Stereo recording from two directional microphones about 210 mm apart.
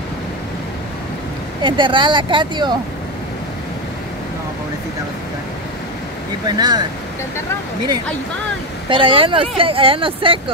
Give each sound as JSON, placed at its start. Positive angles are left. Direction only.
{"t": 1.6, "sound": "speech", "side_deg": -25}
{"t": 6.4, "sound": "speech", "side_deg": -20}
{"t": 8.8, "sound": "speech", "side_deg": -25}